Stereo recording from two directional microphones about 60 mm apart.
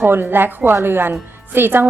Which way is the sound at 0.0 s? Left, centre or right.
Right.